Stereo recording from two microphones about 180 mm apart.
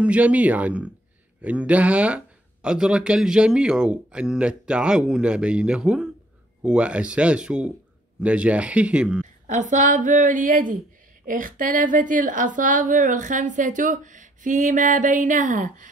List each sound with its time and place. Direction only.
0.0 s speech: 5° right (ahead or behind)
9.5 s a woman's voice: 45° right (ahead or behind)